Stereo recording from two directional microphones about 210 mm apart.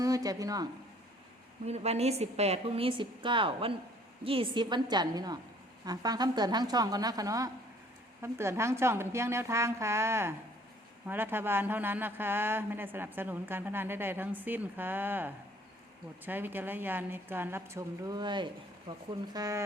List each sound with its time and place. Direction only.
0.0 s speech: 15° right (ahead or behind)
1.6 s a woman's voice: 30° right (ahead or behind)